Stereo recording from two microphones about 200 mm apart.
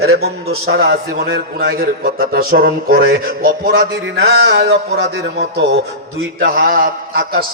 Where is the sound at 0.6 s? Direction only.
55° right (ahead or behind).